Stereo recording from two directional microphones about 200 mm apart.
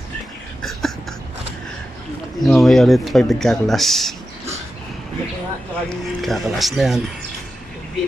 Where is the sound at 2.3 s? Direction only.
Centre (ahead or behind).